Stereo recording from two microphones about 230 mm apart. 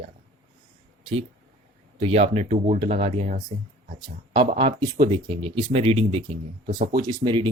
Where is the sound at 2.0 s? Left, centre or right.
Right.